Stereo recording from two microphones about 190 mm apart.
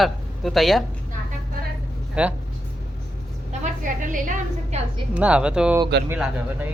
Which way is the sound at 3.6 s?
45° right (ahead or behind).